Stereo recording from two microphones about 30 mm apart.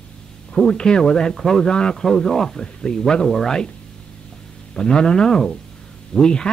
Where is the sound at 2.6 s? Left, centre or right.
Left.